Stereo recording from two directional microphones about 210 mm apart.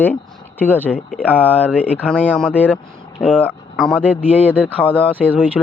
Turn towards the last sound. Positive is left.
turn(degrees=5)  # may be behind; listen again after turning